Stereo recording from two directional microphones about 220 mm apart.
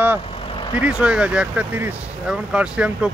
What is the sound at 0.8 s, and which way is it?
Speech, 5° right (ahead or behind).